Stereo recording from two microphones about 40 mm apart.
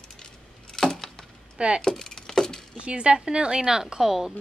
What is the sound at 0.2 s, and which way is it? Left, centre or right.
Keys jangling, centre.